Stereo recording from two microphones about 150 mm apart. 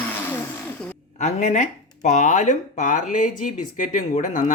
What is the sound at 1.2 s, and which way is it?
Speech, 55° left (ahead or behind).